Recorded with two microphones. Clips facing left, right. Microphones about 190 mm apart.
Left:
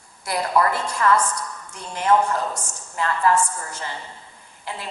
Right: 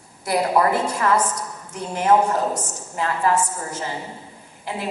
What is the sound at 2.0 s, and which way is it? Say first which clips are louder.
Speech: right 2 dB; 25° right (ahead or behind).